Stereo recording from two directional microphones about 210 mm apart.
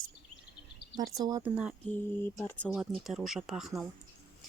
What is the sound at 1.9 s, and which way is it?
Speech, 10° left (ahead or behind).